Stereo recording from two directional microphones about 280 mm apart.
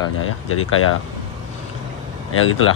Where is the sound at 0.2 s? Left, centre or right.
Left.